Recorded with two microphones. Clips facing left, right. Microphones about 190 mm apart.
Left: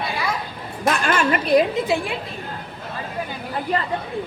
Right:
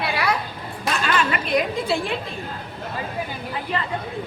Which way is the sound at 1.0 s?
45° left (ahead or behind).